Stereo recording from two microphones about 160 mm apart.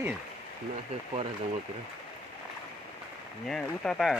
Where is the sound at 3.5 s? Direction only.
5° left (ahead or behind).